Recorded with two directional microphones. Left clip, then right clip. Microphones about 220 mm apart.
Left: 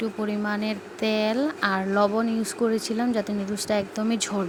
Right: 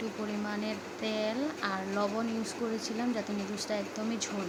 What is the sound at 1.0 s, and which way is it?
Speech, 30° left (ahead or behind).